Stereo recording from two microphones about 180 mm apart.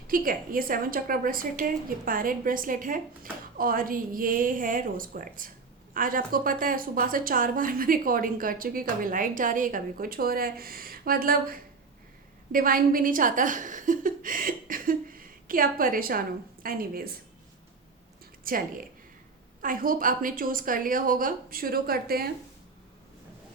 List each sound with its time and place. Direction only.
0.1 s a woman's voice: 50° right (ahead or behind)
18.4 s a woman's voice: 50° right (ahead or behind)